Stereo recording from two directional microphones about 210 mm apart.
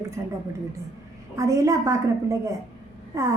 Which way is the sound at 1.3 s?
15° right (ahead or behind).